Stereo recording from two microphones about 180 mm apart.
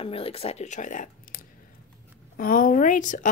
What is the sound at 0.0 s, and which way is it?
Speech, 30° left (ahead or behind).